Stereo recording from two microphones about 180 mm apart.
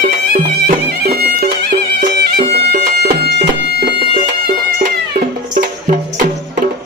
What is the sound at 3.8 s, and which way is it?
Music, 55° right (ahead or behind).